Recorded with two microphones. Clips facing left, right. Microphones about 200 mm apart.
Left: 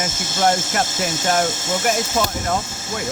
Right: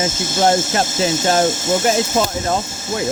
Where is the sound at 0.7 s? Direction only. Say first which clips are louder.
Right 5 dB; 25° right (ahead or behind).